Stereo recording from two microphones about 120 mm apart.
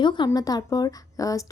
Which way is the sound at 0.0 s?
40° left (ahead or behind).